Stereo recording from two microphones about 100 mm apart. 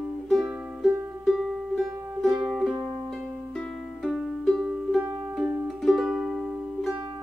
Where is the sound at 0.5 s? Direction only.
15° right (ahead or behind).